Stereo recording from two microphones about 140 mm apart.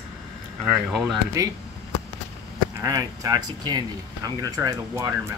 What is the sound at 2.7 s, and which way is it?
Speech, 25° right (ahead or behind).